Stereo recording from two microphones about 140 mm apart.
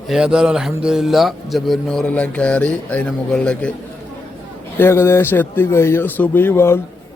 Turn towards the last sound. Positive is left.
turn(degrees=20)  # may be behind; listen again after turning